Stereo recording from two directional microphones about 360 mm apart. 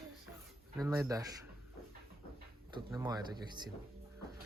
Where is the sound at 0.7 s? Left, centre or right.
Centre.